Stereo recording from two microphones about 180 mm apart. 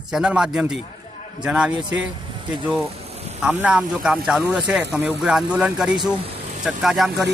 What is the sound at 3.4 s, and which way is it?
Speech, 5° right (ahead or behind).